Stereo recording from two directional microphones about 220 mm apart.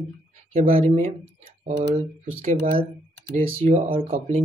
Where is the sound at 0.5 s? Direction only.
30° right (ahead or behind).